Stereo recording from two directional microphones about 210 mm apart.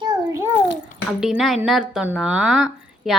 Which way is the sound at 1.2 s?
Centre (ahead or behind).